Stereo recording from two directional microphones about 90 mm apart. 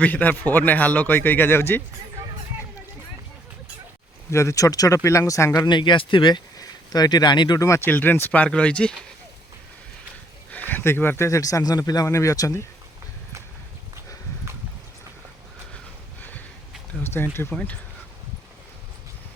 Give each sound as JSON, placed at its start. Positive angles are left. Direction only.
{"t": 0.0, "sound": "speech", "side_deg": 20}
{"t": 4.3, "sound": "speech", "side_deg": 30}
{"t": 5.5, "sound": "speech", "side_deg": 60}
{"t": 7.6, "sound": "speech", "side_deg": 35}
{"t": 7.9, "sound": "speech", "side_deg": 20}
{"t": 10.5, "sound": "a sound", "side_deg": 20}
{"t": 11.3, "sound": "a man's voice", "side_deg": 35}
{"t": 12.0, "sound": "speech", "side_deg": 35}
{"t": 16.9, "sound": "speech", "side_deg": -5}
{"t": 17.5, "sound": "speech", "side_deg": 10}